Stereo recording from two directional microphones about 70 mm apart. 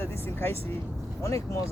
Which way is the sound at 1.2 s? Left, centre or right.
Left.